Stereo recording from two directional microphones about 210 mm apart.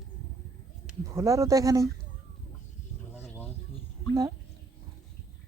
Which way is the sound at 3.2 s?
10° left (ahead or behind).